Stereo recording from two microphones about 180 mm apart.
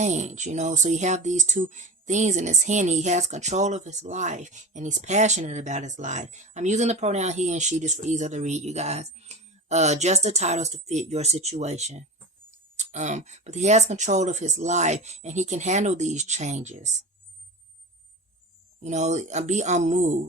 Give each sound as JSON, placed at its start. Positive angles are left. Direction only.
{"t": 0.0, "sound": "speech", "side_deg": -40}
{"t": 18.8, "sound": "speech", "side_deg": -40}